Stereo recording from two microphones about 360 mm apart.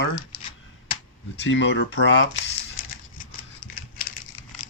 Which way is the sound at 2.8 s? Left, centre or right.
Left.